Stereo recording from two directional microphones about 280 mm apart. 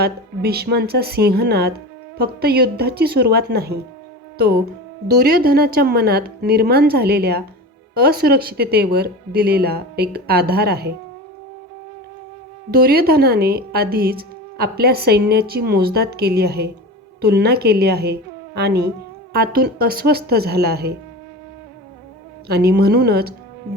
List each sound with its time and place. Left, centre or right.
0.0 s speech: right
5.1 s speech: right
12.7 s speech: right
22.4 s speech: right